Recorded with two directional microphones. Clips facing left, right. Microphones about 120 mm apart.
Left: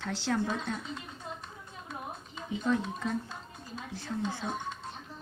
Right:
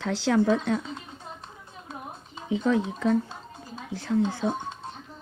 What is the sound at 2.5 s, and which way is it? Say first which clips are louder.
Speech: right 6 dB; 90° right.